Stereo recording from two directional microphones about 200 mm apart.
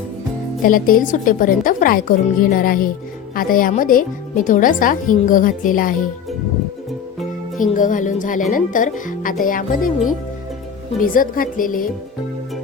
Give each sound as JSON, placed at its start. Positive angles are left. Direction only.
{"t": 0.6, "sound": "a woman's voice", "side_deg": 45}
{"t": 7.6, "sound": "a woman's voice", "side_deg": 40}